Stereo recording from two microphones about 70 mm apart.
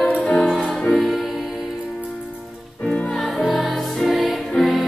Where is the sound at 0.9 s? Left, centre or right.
Centre.